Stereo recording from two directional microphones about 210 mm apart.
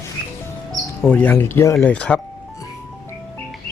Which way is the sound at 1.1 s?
10° left (ahead or behind).